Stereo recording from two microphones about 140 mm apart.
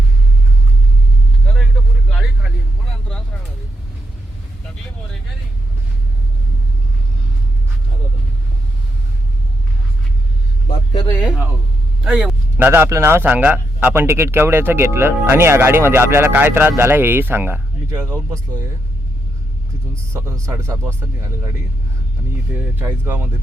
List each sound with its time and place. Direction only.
1.5 s vehicle: centre (ahead or behind)
11.1 s music: 10° left (ahead or behind)
12.0 s a man's voice: 5° right (ahead or behind); by 18.7 s 20° right (ahead or behind)
20.1 s speech: 20° right (ahead or behind)
22.5 s a man's voice: 15° right (ahead or behind)